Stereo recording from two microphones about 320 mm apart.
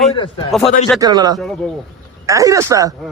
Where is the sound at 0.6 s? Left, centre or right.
Centre.